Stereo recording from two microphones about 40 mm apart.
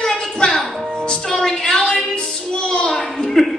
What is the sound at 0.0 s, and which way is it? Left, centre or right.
Music, centre.